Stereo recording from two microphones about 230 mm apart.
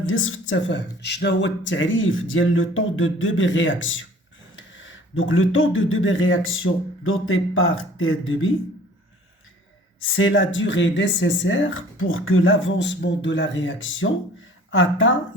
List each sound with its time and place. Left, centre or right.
0.0 s speech: left
10.0 s speech: left